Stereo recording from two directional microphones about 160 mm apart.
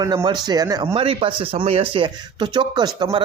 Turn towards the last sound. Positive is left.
turn(degrees=-25)  # may be behind; listen again after turning